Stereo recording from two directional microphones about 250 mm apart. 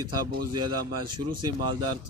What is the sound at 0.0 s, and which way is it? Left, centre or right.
Speech, right.